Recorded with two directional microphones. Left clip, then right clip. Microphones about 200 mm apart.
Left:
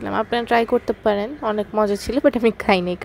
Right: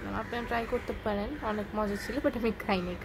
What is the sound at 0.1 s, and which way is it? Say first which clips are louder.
Speech: left 15 dB; 45° left (ahead or behind).